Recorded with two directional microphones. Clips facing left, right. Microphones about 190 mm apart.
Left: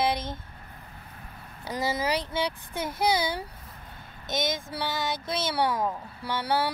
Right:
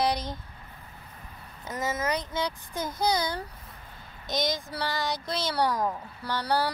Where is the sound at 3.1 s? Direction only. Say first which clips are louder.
Left 1 dB; 5° left (ahead or behind).